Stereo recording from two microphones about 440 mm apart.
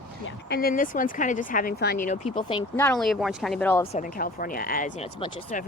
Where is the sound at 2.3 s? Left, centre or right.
Centre.